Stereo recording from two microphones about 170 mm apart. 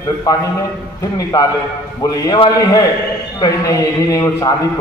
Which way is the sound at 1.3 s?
20° left (ahead or behind).